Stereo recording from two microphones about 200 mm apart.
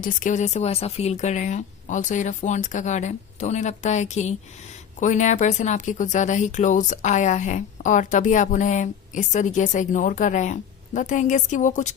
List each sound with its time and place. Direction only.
0.0 s speech: 40° left (ahead or behind)